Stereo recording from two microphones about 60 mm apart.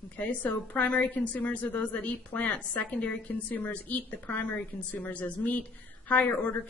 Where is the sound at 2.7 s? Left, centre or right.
Left.